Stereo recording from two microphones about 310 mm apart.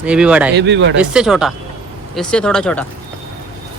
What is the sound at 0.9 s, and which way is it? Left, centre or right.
Speech, centre.